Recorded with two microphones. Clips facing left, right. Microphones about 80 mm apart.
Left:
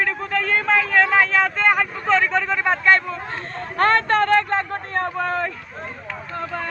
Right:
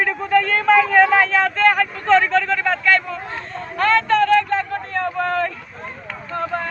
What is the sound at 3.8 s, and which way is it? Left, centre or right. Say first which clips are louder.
Vehicle: right 1 dB; left.